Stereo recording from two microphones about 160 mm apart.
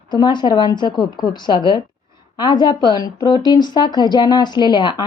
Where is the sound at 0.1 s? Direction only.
30° left (ahead or behind).